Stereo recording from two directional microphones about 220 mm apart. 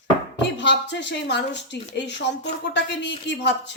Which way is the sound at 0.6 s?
50° left (ahead or behind).